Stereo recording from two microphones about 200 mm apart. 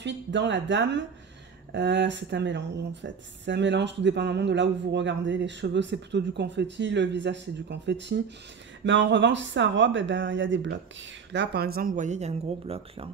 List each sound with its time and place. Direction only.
0.0 s speech: 65° right (ahead or behind); by 13.1 s 30° right (ahead or behind)